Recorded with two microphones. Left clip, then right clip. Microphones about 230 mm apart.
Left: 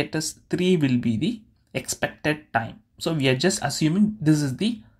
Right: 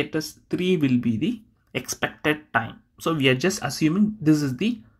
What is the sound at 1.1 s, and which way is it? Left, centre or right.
Speech, left.